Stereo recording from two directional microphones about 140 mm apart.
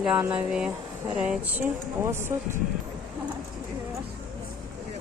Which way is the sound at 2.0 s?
15° right (ahead or behind).